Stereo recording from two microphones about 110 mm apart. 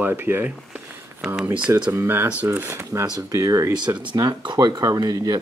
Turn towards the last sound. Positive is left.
turn(degrees=-35)  # may be behind; listen again after turning